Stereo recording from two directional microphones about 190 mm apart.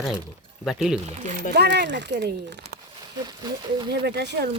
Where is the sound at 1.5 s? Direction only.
60° right (ahead or behind).